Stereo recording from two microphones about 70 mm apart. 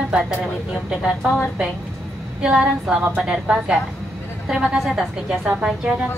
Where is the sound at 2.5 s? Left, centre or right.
Centre.